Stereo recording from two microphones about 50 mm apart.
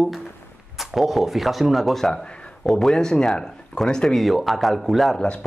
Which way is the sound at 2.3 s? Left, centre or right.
Centre.